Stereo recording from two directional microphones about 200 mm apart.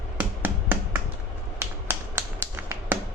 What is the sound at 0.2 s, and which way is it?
Finger snapping, 10° right (ahead or behind).